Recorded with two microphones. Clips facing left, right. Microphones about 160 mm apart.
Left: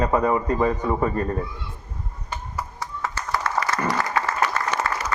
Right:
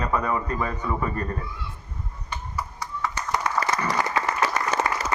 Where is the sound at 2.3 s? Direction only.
45° left (ahead or behind).